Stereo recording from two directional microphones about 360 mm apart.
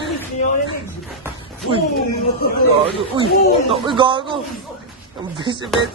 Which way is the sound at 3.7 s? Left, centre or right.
Centre.